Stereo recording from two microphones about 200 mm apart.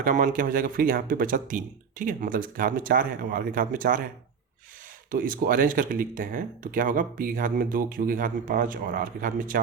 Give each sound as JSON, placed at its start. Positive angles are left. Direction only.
{"t": 0.0, "sound": "speech", "side_deg": -40}
{"t": 5.1, "sound": "speech", "side_deg": -45}